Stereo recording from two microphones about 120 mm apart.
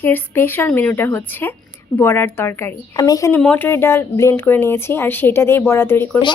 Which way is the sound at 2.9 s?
30° left (ahead or behind).